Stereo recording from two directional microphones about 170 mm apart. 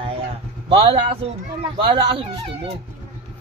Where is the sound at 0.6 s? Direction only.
30° right (ahead or behind).